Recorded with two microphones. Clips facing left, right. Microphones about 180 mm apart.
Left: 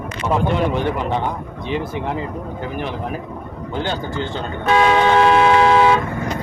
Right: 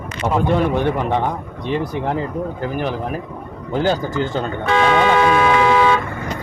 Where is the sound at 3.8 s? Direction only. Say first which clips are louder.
Right 5 dB; 40° right (ahead or behind).